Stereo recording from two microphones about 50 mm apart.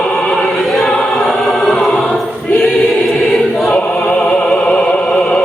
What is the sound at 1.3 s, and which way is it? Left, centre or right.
Choir, centre.